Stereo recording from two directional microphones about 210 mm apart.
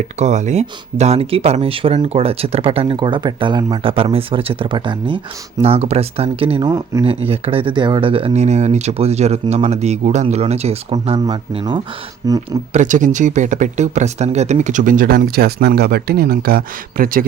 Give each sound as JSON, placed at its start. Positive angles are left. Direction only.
{"t": 0.2, "sound": "speech", "side_deg": -35}
{"t": 12.7, "sound": "speech", "side_deg": -35}